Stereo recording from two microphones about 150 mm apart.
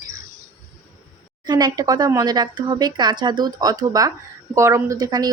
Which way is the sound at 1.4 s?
30° right (ahead or behind).